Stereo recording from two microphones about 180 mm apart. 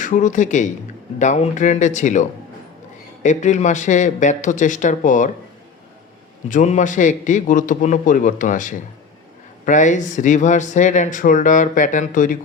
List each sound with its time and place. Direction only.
0.0 s speech: 45° left (ahead or behind)
3.2 s speech: 40° left (ahead or behind)
6.5 s speech: 45° left (ahead or behind)